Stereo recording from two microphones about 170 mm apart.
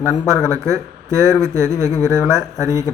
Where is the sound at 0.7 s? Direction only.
15° right (ahead or behind).